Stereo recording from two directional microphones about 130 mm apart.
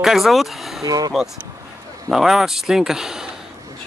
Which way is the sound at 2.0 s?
Centre (ahead or behind).